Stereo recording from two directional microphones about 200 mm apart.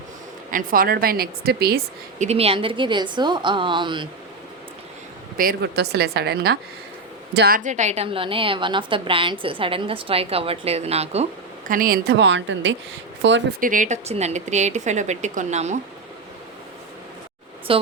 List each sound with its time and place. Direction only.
0.5 s a woman's voice: 45° right (ahead or behind)
2.1 s a woman's voice: 30° right (ahead or behind)
5.4 s a woman's voice: 50° right (ahead or behind); by 11.3 s 30° right (ahead or behind)
11.7 s a woman's voice: 45° right (ahead or behind); by 13.4 s 65° right (ahead or behind)
13.6 s a woman's voice: 40° right (ahead or behind)
17.7 s a woman's voice: 25° right (ahead or behind)